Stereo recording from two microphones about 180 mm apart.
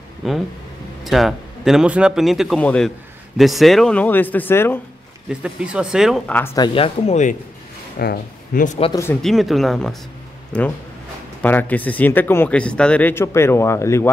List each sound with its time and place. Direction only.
0.2 s speech: centre (ahead or behind)
5.3 s speech: 5° right (ahead or behind); by 7.3 s 40° left (ahead or behind)
8.0 s speech: 55° left (ahead or behind)
8.9 s speech: 15° left (ahead or behind)
9.2 s speech: centre (ahead or behind)